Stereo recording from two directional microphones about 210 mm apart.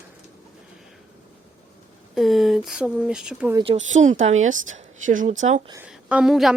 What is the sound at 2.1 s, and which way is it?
Speech, centre (ahead or behind).